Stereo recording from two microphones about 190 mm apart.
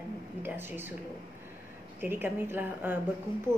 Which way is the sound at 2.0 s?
10° right (ahead or behind).